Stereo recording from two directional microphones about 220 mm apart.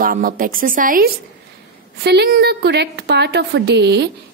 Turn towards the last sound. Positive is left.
turn(degrees=-50)  # may be behind; listen again after turning